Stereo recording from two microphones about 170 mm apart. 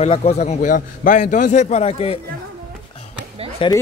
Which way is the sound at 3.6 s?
30° left (ahead or behind).